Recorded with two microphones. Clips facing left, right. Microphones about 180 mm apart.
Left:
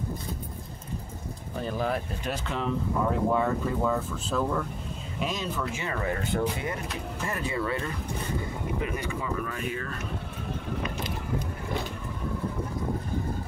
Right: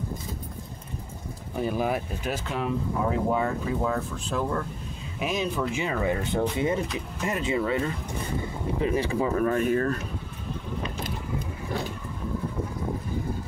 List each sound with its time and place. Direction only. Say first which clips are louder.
1.6 s speech: right 3 dB; 10° right (ahead or behind)
5.2 s speech: right 4 dB; 10° right (ahead or behind); by 9.3 s 30° right (ahead or behind)
9.4 s speech: right 10 dB; 45° right (ahead or behind)